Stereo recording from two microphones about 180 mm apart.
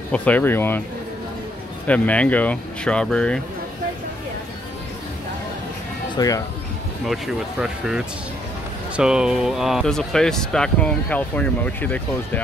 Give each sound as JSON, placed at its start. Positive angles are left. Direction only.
{"t": 0.1, "sound": "speech", "side_deg": 10}
{"t": 1.9, "sound": "speech", "side_deg": 10}
{"t": 6.1, "sound": "speech", "side_deg": 20}
{"t": 8.9, "sound": "speech", "side_deg": -5}